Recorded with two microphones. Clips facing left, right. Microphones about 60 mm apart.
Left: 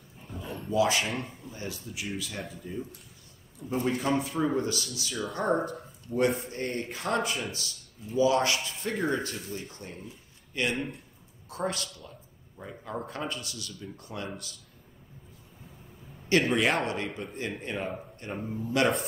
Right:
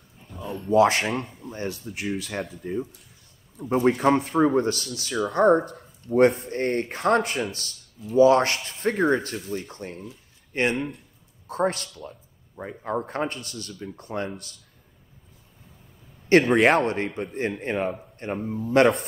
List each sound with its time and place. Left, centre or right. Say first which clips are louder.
0.3 s a sound: right 5 dB; centre
0.7 s a man's voice: right 7 dB; right
16.3 s a man's voice: right 7 dB; right